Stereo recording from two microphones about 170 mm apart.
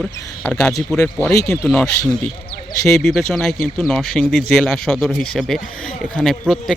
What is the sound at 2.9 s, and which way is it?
A man's voice, centre (ahead or behind).